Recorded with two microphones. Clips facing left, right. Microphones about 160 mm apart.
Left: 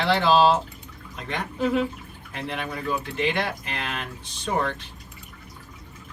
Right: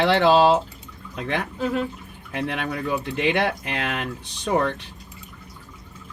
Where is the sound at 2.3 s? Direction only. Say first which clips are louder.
Right 5 dB; 65° right (ahead or behind).